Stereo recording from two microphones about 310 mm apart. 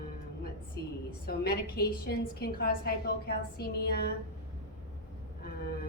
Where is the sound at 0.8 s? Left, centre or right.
Left.